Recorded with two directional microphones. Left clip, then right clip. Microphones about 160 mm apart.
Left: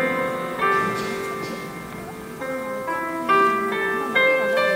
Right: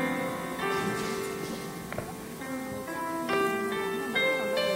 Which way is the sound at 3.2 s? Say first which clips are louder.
Left 11 dB; 10° right (ahead or behind).